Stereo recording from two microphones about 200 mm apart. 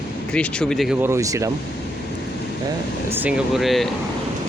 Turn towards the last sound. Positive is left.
turn(degrees=0)  # may be behind; listen again after turning